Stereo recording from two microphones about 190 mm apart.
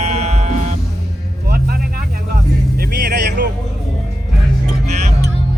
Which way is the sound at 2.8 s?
55° right (ahead or behind).